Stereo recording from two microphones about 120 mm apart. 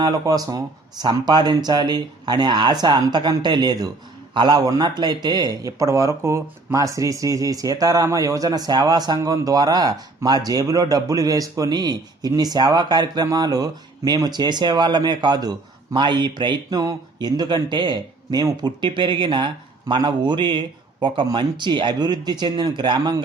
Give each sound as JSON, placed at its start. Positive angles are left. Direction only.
{"t": 0.0, "sound": "a man's voice", "side_deg": -30}